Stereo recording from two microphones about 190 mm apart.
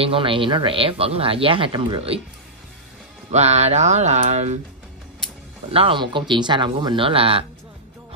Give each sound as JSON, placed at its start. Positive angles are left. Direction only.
{"t": 0.0, "sound": "speech", "side_deg": -30}
{"t": 3.3, "sound": "speech", "side_deg": -35}
{"t": 5.7, "sound": "speech", "side_deg": -30}